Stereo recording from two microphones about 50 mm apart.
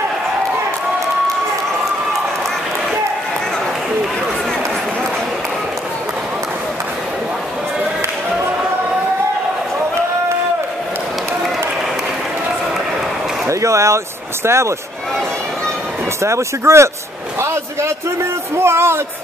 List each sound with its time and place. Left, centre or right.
13.5 s a sound: right
16.2 s speech: right
18.6 s speech: right